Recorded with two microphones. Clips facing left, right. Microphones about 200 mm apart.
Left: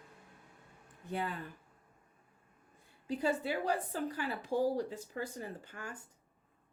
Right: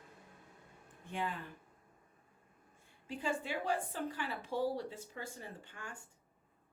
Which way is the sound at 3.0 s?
40° left (ahead or behind).